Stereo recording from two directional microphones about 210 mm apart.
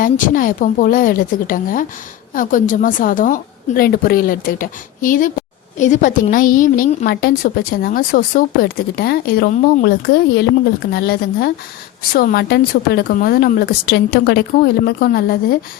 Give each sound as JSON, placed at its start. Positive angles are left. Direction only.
{"t": 0.0, "sound": "a woman's voice", "side_deg": 40}